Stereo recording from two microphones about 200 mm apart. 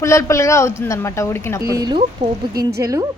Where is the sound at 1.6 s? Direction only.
20° right (ahead or behind).